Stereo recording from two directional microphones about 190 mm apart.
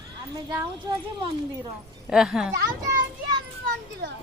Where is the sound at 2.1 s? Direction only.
5° right (ahead or behind).